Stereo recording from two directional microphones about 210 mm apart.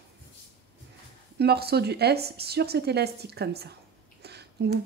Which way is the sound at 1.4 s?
50° right (ahead or behind).